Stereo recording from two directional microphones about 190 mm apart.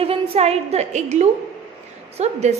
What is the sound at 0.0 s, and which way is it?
A woman's voice, 30° right (ahead or behind).